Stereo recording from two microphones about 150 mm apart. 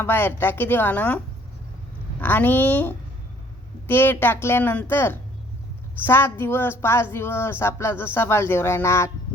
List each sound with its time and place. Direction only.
0.0 s speech: 15° left (ahead or behind)
2.2 s speech: 10° left (ahead or behind)